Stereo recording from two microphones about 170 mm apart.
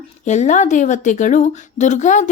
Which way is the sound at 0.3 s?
45° left (ahead or behind).